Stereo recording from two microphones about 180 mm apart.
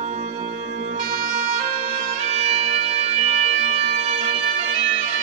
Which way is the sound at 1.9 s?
40° right (ahead or behind).